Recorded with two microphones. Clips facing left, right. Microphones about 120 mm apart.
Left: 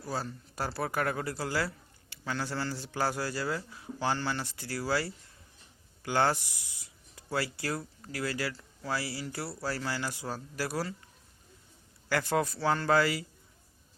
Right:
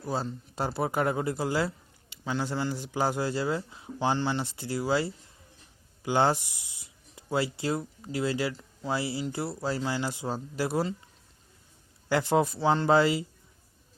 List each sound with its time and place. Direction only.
0.0 s speech: 20° right (ahead or behind)
12.0 s speech: 20° right (ahead or behind)